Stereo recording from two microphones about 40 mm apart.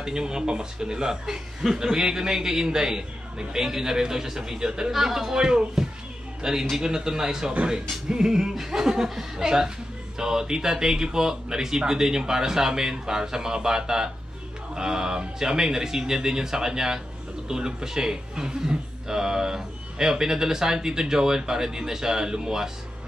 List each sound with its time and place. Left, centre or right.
0.0 s speech: centre
4.9 s speech: centre
6.4 s speech: centre